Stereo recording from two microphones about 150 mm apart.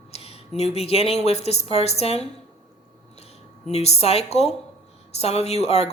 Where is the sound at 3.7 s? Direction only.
45° left (ahead or behind).